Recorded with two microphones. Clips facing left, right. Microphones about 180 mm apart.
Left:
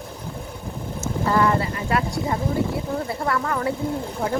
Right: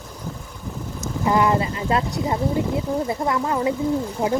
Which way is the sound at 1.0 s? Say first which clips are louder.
Right 1 dB; 15° right (ahead or behind).